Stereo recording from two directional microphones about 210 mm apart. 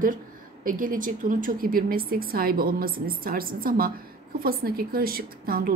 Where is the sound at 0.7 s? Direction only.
40° right (ahead or behind).